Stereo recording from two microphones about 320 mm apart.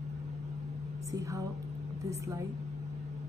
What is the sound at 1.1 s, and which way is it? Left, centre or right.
Speech, centre.